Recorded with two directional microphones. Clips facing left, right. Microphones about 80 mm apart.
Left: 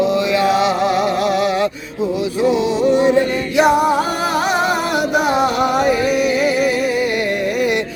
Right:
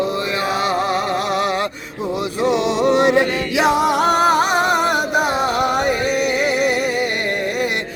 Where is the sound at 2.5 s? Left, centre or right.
Right.